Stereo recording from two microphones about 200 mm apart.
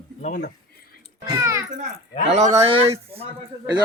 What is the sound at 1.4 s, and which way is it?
Speech, 15° right (ahead or behind).